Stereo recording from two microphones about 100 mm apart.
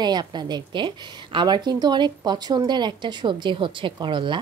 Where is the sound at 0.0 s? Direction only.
45° right (ahead or behind).